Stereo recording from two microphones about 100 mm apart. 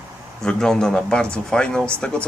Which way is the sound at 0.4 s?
5° left (ahead or behind).